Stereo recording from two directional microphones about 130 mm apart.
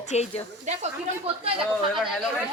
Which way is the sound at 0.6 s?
55° right (ahead or behind).